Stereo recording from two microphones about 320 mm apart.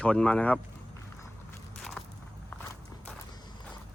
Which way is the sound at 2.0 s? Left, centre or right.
Centre.